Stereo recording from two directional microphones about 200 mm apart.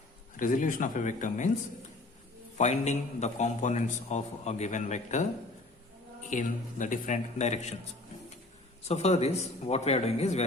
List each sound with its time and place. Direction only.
0.3 s a man's voice: 40° left (ahead or behind)
2.6 s a man's voice: 35° left (ahead or behind)
6.3 s a man's voice: 40° left (ahead or behind)
8.9 s a man's voice: 35° left (ahead or behind)